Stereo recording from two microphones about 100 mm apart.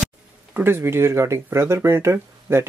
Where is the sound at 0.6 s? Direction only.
25° right (ahead or behind).